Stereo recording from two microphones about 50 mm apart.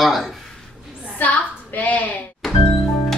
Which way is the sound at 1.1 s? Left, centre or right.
Left.